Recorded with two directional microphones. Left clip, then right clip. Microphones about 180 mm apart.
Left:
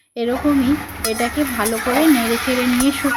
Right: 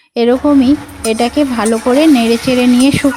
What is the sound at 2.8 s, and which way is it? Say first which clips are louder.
Speech: right 7 dB; 45° right (ahead or behind).